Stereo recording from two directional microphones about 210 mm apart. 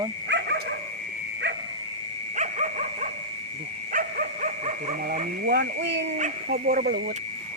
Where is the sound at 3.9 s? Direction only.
40° right (ahead or behind).